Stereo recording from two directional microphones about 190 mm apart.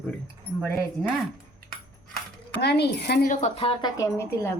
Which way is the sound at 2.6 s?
60° left (ahead or behind).